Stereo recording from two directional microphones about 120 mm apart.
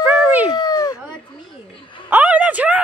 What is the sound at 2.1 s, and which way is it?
Speech, 10° right (ahead or behind).